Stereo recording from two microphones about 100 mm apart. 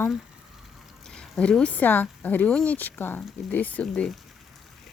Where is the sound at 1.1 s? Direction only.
5° left (ahead or behind).